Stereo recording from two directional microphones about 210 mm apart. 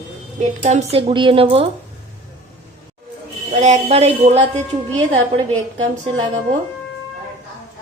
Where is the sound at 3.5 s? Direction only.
35° right (ahead or behind).